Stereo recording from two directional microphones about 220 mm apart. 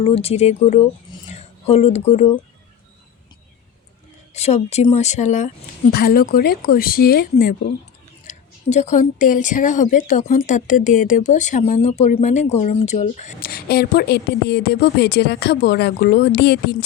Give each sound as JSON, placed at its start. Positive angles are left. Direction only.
{"t": 0.0, "sound": "speech", "side_deg": 25}
{"t": 4.4, "sound": "a woman's voice", "side_deg": 30}
{"t": 5.9, "sound": "a woman's voice", "side_deg": 45}